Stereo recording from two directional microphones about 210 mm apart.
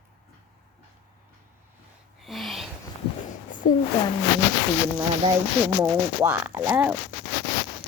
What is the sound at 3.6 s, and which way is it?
Speech, 35° left (ahead or behind).